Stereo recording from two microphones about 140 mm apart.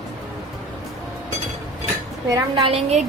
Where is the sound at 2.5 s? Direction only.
45° right (ahead or behind).